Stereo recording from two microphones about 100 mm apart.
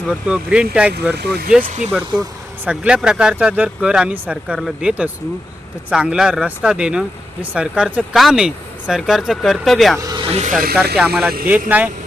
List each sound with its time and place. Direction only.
0.1 s speech: 10° right (ahead or behind)
10.2 s snake: 75° right (ahead or behind)
10.5 s speech: 5° right (ahead or behind)
11.4 s speech: 15° right (ahead or behind)